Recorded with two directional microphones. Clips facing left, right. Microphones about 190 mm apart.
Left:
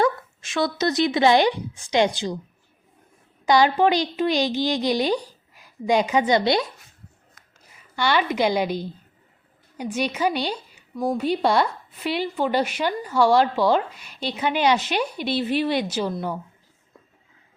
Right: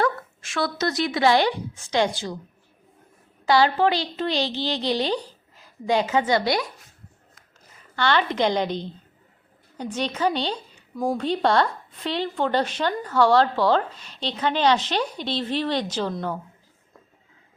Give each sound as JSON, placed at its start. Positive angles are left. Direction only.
{"t": 0.0, "sound": "speech", "side_deg": 20}
{"t": 3.4, "sound": "speech", "side_deg": 15}
{"t": 7.9, "sound": "speech", "side_deg": 10}
{"t": 10.9, "sound": "speech", "side_deg": 0}
{"t": 11.2, "sound": "speech", "side_deg": 10}